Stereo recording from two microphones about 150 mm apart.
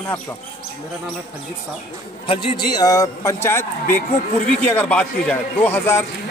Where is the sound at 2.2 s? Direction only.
35° left (ahead or behind).